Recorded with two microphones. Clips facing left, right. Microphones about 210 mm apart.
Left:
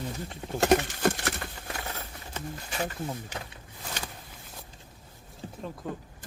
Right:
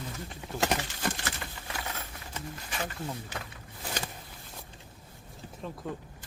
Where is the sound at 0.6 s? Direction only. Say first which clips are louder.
Left 8 dB; 55° left (ahead or behind).